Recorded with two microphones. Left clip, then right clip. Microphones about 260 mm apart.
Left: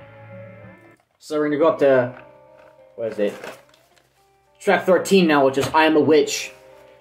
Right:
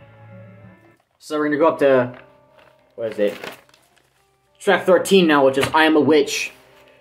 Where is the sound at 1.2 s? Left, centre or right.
Centre.